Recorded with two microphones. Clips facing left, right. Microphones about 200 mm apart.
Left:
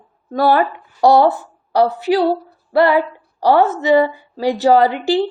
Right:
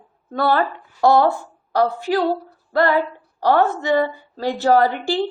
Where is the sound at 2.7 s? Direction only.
10° left (ahead or behind).